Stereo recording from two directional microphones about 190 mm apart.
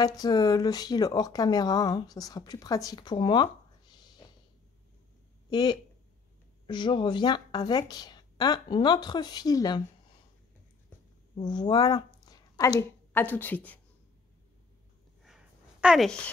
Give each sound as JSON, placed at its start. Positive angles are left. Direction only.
{"t": 0.0, "sound": "speech", "side_deg": 20}
{"t": 5.5, "sound": "speech", "side_deg": 25}
{"t": 11.4, "sound": "speech", "side_deg": 20}
{"t": 15.2, "sound": "a sound", "side_deg": -5}